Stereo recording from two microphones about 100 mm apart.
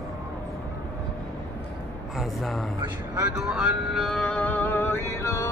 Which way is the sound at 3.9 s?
5° left (ahead or behind).